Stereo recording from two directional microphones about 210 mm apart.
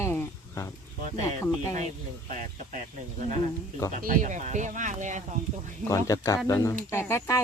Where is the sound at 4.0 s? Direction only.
40° right (ahead or behind).